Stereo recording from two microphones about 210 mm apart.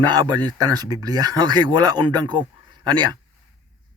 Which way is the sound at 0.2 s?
20° right (ahead or behind).